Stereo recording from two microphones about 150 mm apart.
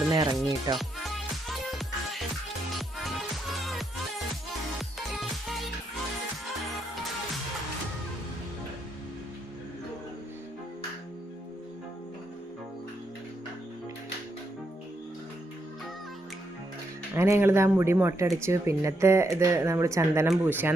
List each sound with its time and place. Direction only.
0.1 s music: 30° right (ahead or behind)
0.4 s speech: 25° right (ahead or behind)
0.8 s music: centre (ahead or behind)
2.7 s music: centre (ahead or behind)
17.2 s speech: 15° right (ahead or behind)